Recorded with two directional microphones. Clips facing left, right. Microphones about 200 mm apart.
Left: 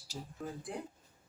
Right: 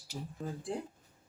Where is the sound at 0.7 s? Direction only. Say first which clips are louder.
Right 6 dB; 25° right (ahead or behind).